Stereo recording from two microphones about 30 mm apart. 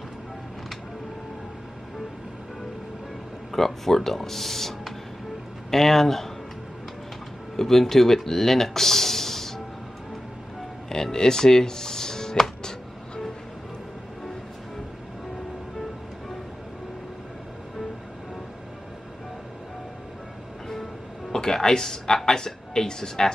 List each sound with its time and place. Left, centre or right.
3.5 s speech: centre
7.5 s speech: centre
10.9 s speech: centre
21.3 s speech: centre